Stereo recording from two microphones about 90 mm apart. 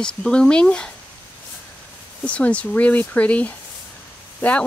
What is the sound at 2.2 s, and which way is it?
Speech, 15° left (ahead or behind).